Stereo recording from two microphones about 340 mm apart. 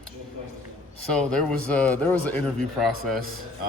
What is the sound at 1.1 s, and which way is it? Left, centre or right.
Speech, centre.